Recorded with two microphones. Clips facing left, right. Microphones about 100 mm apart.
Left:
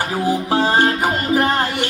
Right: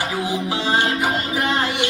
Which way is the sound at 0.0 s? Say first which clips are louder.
Left 4 dB; 45° left (ahead or behind).